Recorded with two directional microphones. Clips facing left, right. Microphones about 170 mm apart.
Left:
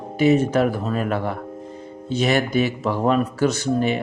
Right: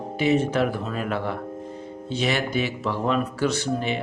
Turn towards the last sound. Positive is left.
turn(degrees=45)  # may be behind; listen again after turning